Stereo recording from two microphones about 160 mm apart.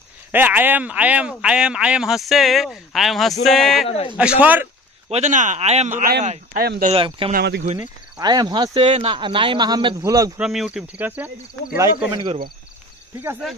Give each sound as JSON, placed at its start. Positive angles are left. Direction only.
{"t": 0.3, "sound": "speech", "side_deg": -10}
{"t": 3.8, "sound": "speech", "side_deg": 40}
{"t": 4.2, "sound": "speech", "side_deg": -5}
{"t": 5.1, "sound": "speech", "side_deg": -50}
{"t": 6.5, "sound": "speech", "side_deg": -70}
{"t": 6.9, "sound": "speech", "side_deg": -35}
{"t": 7.3, "sound": "speech", "side_deg": -90}
{"t": 8.2, "sound": "a man's voice", "side_deg": -25}
{"t": 8.7, "sound": "a man's voice", "side_deg": -35}
{"t": 10.4, "sound": "speech", "side_deg": -5}
{"t": 12.1, "sound": "speech", "side_deg": -30}